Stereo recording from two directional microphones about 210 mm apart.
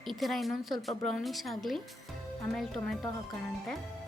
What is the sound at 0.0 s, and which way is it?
A woman's voice, centre (ahead or behind).